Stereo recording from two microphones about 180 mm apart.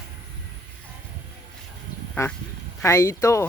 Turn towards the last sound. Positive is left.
turn(degrees=15)  # may be behind; listen again after turning